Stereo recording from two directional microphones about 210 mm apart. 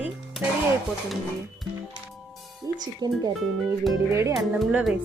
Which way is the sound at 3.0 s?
20° right (ahead or behind).